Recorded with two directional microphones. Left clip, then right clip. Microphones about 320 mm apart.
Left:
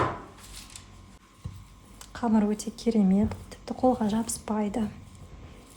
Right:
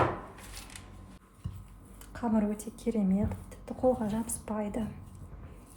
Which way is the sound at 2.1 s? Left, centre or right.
Left.